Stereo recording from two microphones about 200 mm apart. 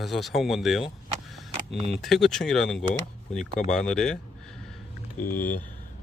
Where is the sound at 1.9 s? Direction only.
Centre (ahead or behind).